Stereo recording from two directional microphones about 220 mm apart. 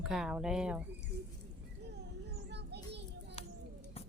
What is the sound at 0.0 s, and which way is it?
Speech, 5° right (ahead or behind).